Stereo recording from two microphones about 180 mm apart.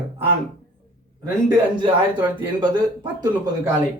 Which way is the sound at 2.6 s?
25° right (ahead or behind).